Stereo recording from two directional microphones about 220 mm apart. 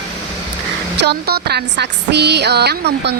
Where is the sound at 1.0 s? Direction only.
50° right (ahead or behind).